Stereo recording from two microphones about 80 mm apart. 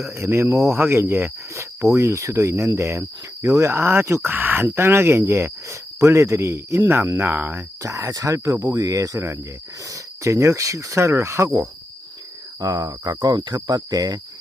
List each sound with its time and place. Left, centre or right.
0.2 s cricket: right
4.3 s speech: right
4.6 s cricket: right
7.8 s speech: right
9.9 s cricket: right
12.5 s cricket: right